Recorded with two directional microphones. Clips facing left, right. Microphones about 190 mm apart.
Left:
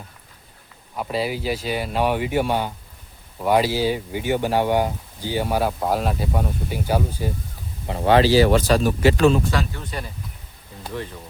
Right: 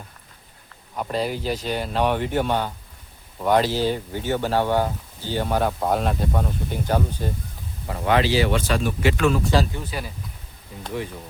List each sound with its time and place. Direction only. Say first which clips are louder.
0.9 s speech: left 1 dB; 5° left (ahead or behind)
7.9 s speech: left 4 dB; 30° left (ahead or behind)
9.8 s speech: even; 5° right (ahead or behind)